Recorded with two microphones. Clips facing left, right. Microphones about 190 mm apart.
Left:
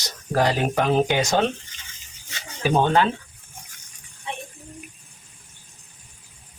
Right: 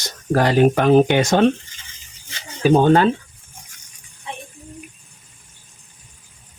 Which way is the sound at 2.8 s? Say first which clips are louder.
Right 5 dB; 45° right (ahead or behind).